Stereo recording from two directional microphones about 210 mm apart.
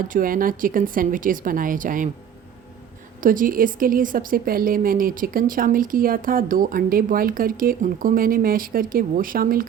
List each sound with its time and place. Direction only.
0.1 s speech: 40° right (ahead or behind)
3.2 s a woman's voice: 40° right (ahead or behind)